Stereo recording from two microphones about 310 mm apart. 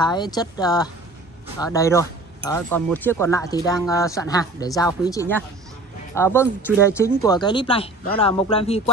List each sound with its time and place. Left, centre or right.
0.0 s speech: centre